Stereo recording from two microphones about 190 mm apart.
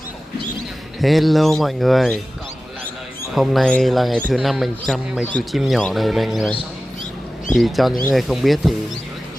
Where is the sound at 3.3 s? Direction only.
Centre (ahead or behind).